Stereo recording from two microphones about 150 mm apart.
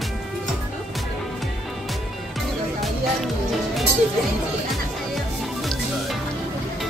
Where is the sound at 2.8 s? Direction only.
Centre (ahead or behind).